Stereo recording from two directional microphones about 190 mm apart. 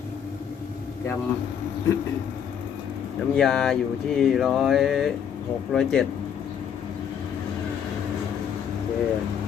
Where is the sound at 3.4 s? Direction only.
Centre (ahead or behind).